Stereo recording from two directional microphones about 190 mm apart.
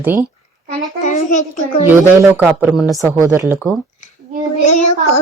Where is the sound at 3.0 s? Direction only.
15° right (ahead or behind).